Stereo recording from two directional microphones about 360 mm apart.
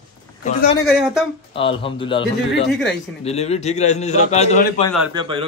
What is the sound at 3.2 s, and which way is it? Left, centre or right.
A man's voice, centre.